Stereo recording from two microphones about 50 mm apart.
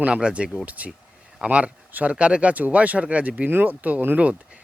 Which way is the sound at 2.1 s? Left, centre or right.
Right.